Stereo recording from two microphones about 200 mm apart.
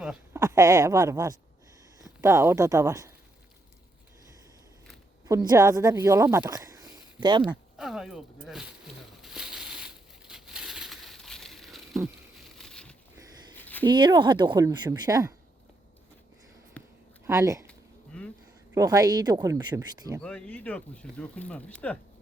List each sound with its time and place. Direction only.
0.0 s speech: 10° right (ahead or behind)
5.3 s speech: 15° right (ahead or behind)
7.8 s speech: centre (ahead or behind)
9.2 s crushing: centre (ahead or behind)
12.5 s a sound: 5° left (ahead or behind)
13.8 s speech: 20° right (ahead or behind)
16.8 s a sound: 5° left (ahead or behind)
17.2 s speech: 15° right (ahead or behind)
17.7 s a sound: 5° left (ahead or behind)
18.7 s speech: 15° right (ahead or behind)
20.2 s speech: 5° left (ahead or behind)